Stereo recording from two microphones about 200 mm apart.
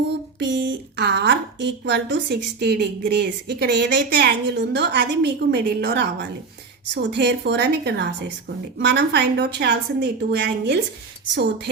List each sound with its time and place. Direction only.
0.3 s a woman's voice: 60° right (ahead or behind)